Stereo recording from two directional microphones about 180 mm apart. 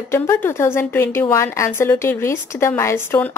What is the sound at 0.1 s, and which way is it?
A woman's voice, 15° left (ahead or behind).